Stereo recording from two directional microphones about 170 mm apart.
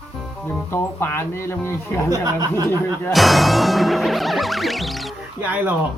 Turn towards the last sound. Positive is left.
turn(degrees=-10)  # may be behind; listen again after turning